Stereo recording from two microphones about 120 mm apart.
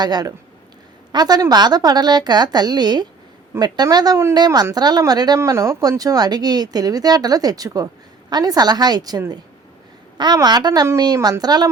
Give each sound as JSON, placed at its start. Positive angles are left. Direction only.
{"t": 0.0, "sound": "speech", "side_deg": -35}